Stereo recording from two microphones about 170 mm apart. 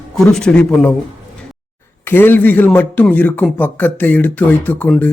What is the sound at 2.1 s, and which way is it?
A man's voice, 10° left (ahead or behind).